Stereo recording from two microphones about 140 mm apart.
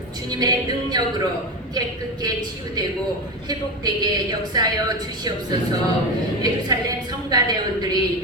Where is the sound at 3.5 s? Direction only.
30° right (ahead or behind).